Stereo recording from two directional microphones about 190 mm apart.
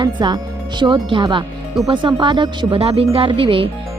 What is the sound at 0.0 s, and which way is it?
Speech, 25° right (ahead or behind).